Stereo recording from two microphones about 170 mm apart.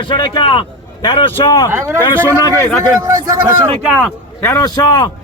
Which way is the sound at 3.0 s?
20° right (ahead or behind).